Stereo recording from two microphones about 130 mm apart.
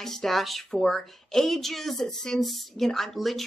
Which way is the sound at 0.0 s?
5° left (ahead or behind).